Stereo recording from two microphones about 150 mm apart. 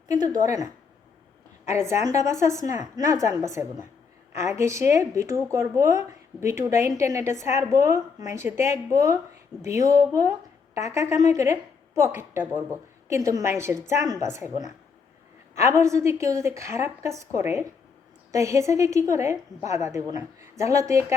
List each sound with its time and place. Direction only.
0.1 s a woman's voice: 25° right (ahead or behind)
1.7 s a woman's voice: 15° right (ahead or behind)
9.6 s a woman's voice: 20° right (ahead or behind)